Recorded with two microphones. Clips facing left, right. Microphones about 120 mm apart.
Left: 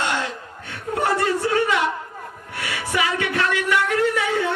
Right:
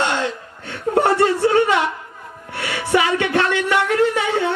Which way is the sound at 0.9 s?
30° right (ahead or behind).